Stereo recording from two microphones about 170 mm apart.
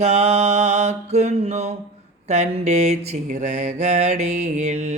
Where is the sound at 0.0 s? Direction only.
40° right (ahead or behind).